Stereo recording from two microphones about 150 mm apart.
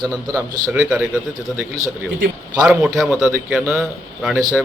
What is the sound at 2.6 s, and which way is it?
A woman's voice, 5° right (ahead or behind).